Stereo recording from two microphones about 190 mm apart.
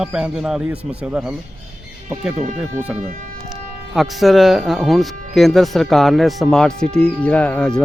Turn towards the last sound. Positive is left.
turn(degrees=5)  # may be behind; listen again after turning